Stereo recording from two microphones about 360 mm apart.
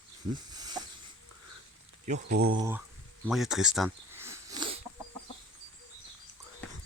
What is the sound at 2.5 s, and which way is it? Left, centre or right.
Speech, centre.